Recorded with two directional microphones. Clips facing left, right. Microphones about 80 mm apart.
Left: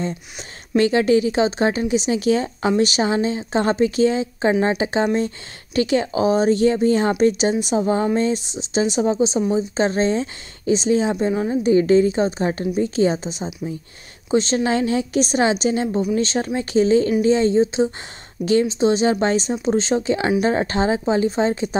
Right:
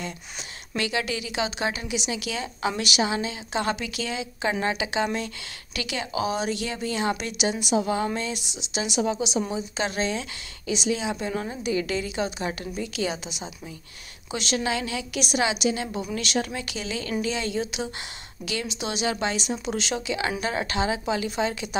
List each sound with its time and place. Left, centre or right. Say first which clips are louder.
0.7 s speech: left 12 dB; left